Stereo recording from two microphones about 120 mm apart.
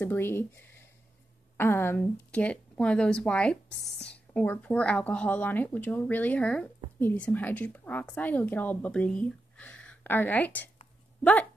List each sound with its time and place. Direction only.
0.0 s a woman's voice: 20° left (ahead or behind)